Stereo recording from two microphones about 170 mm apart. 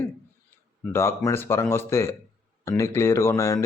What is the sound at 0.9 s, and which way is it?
Speech, 15° left (ahead or behind).